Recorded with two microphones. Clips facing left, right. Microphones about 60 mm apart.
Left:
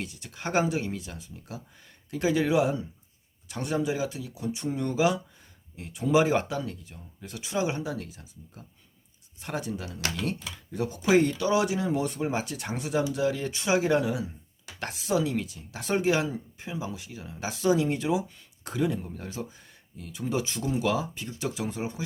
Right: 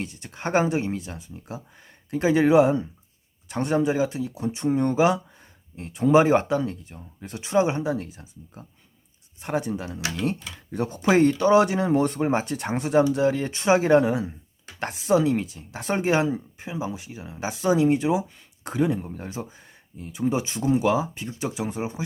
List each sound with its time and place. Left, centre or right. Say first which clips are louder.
0.0 s speech: right 4 dB; right
10.7 s speech: right 2 dB; right